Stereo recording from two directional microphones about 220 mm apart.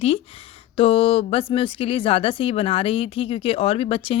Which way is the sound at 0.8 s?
25° left (ahead or behind).